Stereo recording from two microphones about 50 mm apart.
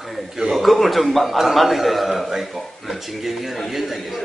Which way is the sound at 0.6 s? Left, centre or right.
Centre.